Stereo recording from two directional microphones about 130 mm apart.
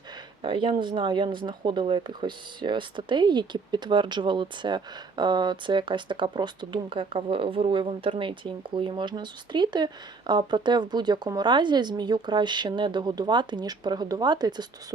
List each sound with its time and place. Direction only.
0.4 s speech: 35° right (ahead or behind)